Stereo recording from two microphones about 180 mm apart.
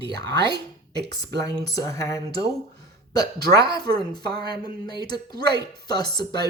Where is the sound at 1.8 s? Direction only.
15° left (ahead or behind).